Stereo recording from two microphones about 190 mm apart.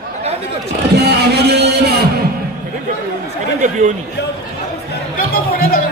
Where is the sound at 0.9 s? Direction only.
60° right (ahead or behind).